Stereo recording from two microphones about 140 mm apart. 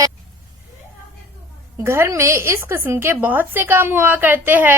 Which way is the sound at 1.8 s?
20° right (ahead or behind).